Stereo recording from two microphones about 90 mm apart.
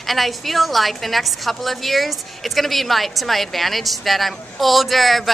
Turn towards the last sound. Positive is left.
turn(degrees=0)  # may be behind; listen again after turning